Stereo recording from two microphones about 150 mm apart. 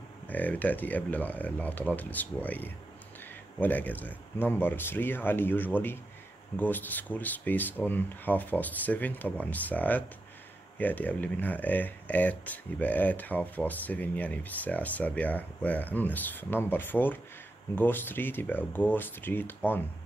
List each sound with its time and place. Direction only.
0.3 s speech: 10° left (ahead or behind)